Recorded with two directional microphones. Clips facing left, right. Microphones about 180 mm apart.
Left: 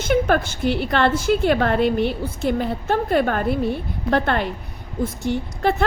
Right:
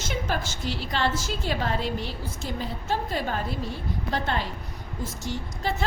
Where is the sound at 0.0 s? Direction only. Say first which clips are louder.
Left 11 dB; 60° left (ahead or behind).